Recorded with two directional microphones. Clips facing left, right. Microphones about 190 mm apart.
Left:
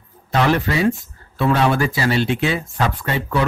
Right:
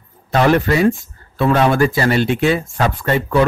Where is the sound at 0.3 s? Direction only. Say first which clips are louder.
Right 4 dB; 50° right (ahead or behind).